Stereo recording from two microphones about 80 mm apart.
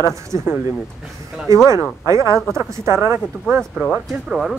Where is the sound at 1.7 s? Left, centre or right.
Right.